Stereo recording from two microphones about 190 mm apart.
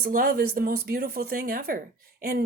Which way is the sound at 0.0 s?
50° right (ahead or behind).